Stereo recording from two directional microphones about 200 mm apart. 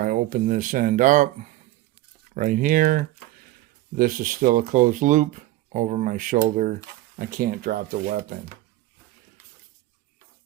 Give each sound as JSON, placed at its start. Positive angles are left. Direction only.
{"t": 0.0, "sound": "speech", "side_deg": -45}
{"t": 2.3, "sound": "speech", "side_deg": -40}